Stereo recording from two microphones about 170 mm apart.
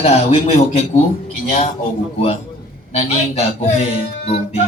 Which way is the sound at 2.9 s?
40° left (ahead or behind).